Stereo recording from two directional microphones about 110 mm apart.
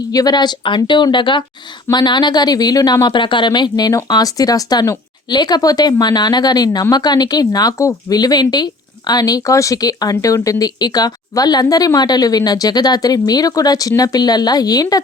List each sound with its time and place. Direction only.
0.1 s a woman's voice: 35° left (ahead or behind)